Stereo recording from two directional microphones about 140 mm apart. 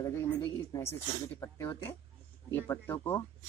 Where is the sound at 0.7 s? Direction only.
20° left (ahead or behind).